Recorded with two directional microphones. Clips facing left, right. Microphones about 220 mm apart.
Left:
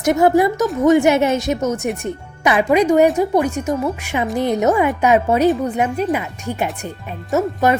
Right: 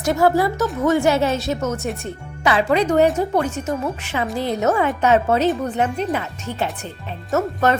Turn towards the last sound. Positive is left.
turn(degrees=10)  # may be behind; listen again after turning